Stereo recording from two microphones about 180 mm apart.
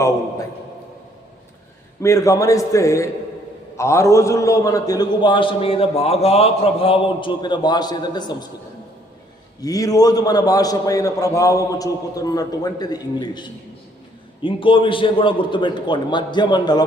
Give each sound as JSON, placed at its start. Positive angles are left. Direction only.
{"t": 2.0, "sound": "a man's voice", "side_deg": 15}
{"t": 9.6, "sound": "a man's voice", "side_deg": 20}